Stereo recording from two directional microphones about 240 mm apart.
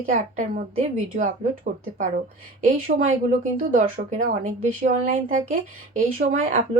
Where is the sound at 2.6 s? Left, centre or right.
Right.